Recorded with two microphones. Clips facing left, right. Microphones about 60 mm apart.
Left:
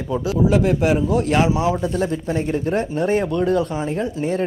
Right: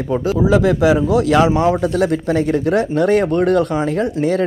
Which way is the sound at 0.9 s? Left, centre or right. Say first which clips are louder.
Right 4 dB; right.